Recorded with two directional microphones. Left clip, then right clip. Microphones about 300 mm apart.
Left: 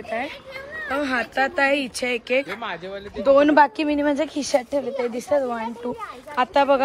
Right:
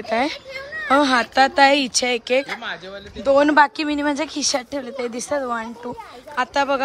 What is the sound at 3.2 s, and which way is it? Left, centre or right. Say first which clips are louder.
Speech: even; centre.